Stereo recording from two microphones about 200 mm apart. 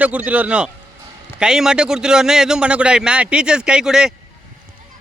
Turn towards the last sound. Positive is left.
turn(degrees=-5)  # may be behind; listen again after turning